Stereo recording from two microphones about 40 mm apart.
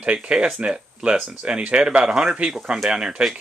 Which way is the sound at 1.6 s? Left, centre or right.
Right.